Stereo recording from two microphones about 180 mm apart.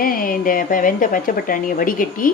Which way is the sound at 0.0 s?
50° left (ahead or behind).